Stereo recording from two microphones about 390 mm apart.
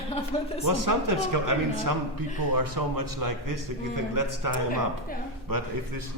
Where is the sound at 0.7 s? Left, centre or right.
Right.